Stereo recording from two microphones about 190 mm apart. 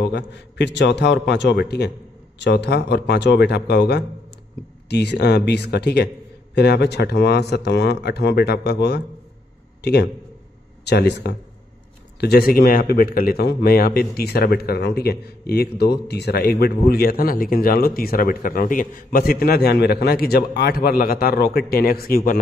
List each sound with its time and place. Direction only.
0.0 s a man's voice: 65° left (ahead or behind); by 22.4 s 50° left (ahead or behind)